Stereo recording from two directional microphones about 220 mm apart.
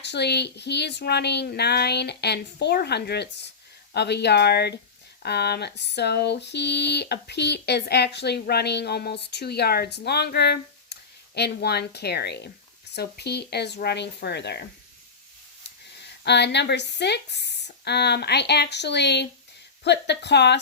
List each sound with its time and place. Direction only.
0.0 s speech: 50° left (ahead or behind)
16.2 s speech: 50° left (ahead or behind)